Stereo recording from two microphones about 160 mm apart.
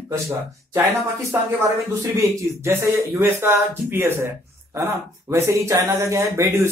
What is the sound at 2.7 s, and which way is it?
Speech, 15° right (ahead or behind).